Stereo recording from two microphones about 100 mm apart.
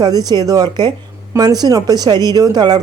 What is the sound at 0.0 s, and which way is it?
A woman's voice, 40° right (ahead or behind).